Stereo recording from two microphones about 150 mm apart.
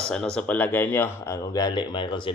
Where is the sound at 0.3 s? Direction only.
10° left (ahead or behind).